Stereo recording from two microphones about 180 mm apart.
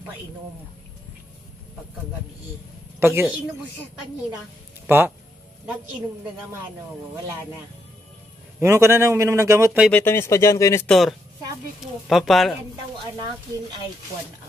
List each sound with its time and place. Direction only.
3.0 s a man's voice: 15° right (ahead or behind)
4.8 s speech: 10° right (ahead or behind)
8.5 s a man's voice: 15° right (ahead or behind)
9.8 s speech: 10° left (ahead or behind)
10.9 s speech: centre (ahead or behind)